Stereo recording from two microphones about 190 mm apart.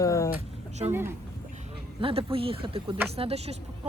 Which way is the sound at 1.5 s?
30° right (ahead or behind).